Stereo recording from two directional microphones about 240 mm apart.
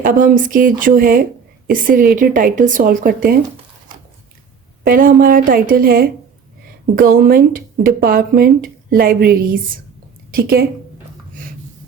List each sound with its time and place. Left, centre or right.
0.0 s speech: right
4.8 s speech: right